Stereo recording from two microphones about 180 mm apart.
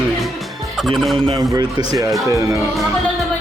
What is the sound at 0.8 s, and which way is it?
Speech, centre (ahead or behind).